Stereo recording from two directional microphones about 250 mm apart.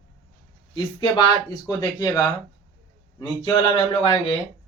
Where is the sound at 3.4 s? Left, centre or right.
Left.